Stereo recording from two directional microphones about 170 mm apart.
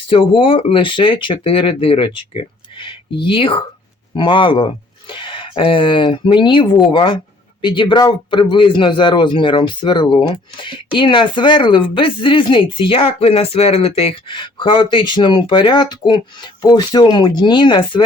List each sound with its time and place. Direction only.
0.1 s a man's voice: 30° left (ahead or behind)